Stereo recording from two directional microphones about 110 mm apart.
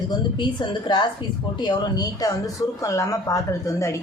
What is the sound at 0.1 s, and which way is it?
A woman's voice, 45° left (ahead or behind).